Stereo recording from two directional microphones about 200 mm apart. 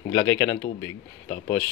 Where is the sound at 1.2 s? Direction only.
35° left (ahead or behind).